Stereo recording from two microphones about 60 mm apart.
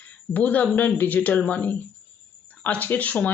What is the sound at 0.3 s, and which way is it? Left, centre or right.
Speech, left.